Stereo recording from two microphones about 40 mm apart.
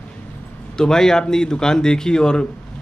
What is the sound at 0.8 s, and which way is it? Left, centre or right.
Speech, centre.